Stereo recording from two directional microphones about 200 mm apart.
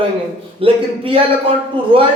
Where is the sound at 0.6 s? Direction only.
25° right (ahead or behind).